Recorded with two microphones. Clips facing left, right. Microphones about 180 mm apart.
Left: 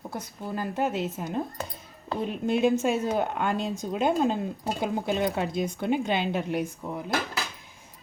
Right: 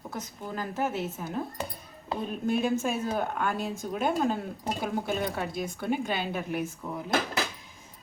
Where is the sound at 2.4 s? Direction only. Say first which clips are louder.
Left 4 dB; 20° left (ahead or behind).